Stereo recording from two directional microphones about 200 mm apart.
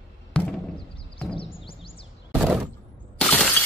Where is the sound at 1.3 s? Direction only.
25° left (ahead or behind).